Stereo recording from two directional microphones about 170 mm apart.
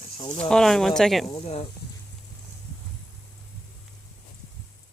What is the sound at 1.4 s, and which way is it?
Speech, 35° left (ahead or behind).